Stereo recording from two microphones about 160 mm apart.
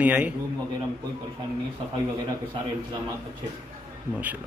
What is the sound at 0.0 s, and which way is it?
Speech, 10° right (ahead or behind).